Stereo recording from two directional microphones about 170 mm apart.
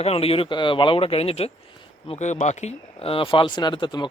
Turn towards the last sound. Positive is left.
turn(degrees=25)  # may be behind; listen again after turning